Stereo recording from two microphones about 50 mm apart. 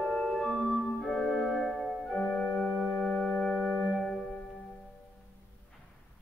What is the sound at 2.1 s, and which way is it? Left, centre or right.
Organ, left.